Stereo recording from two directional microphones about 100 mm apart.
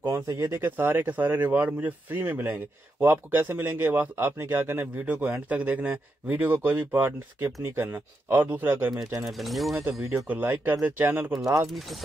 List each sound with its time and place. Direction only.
0.4 s speech: 25° right (ahead or behind)
9.2 s speech: centre (ahead or behind)
10.2 s speech: 20° right (ahead or behind)
11.3 s speech: 35° right (ahead or behind)